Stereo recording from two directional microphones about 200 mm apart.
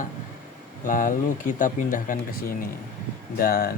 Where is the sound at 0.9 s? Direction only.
45° left (ahead or behind).